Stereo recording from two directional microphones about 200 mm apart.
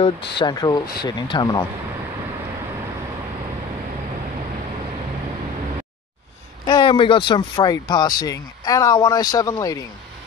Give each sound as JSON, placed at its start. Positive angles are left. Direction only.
{"t": 0.4, "sound": "speech", "side_deg": 20}
{"t": 6.6, "sound": "speech", "side_deg": 20}